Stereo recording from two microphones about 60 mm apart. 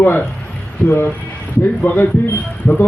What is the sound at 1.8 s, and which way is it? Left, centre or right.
Speech, left.